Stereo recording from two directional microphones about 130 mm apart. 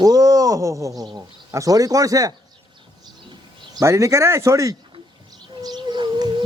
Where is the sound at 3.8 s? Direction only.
25° right (ahead or behind).